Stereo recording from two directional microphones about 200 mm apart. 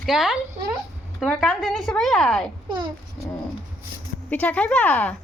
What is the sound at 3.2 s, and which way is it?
Speech, centre (ahead or behind).